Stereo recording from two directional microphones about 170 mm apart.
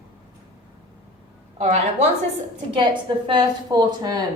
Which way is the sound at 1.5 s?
40° right (ahead or behind).